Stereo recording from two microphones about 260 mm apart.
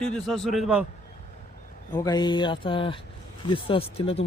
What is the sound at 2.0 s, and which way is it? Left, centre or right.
Speech, centre.